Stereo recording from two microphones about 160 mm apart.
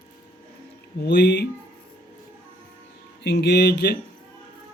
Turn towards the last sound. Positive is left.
turn(degrees=90)